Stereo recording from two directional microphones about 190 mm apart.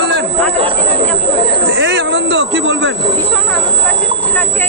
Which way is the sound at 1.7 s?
65° right (ahead or behind).